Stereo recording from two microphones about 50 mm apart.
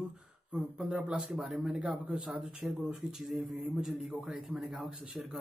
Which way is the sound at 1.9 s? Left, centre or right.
Right.